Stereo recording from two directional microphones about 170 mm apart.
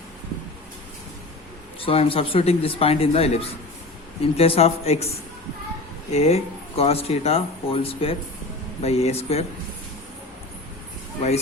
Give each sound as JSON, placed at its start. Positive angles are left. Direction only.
{"t": 1.8, "sound": "speech", "side_deg": 35}
{"t": 6.1, "sound": "speech", "side_deg": 40}